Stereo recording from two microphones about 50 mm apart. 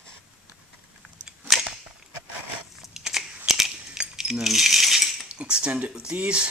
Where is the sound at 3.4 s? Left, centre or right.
Centre.